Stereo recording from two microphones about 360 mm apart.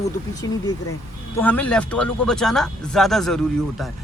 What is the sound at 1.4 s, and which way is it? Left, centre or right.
Speech, centre.